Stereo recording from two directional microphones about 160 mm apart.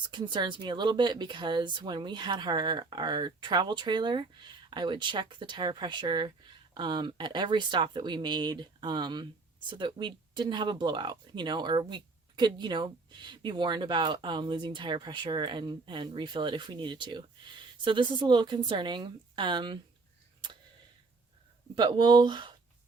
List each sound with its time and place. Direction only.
0.1 s speech: 30° right (ahead or behind)
21.8 s speech: 30° right (ahead or behind)